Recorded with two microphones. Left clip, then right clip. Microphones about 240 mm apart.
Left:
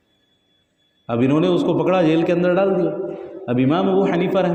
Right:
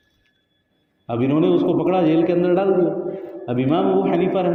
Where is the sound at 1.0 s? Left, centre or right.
Left.